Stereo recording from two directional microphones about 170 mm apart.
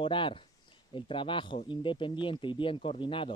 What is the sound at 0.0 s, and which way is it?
Speech, 30° left (ahead or behind).